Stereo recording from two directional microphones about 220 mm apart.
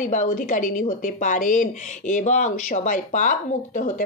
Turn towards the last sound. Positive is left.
turn(degrees=35)  # may be behind; listen again after turning